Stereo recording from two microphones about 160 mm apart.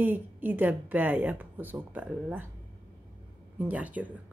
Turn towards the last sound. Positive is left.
turn(degrees=-10)  # may be behind; listen again after turning